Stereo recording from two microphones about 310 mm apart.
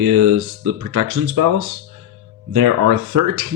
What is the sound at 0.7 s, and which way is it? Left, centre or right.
Speech, right.